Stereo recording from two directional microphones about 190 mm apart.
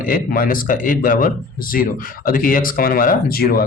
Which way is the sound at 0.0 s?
45° left (ahead or behind).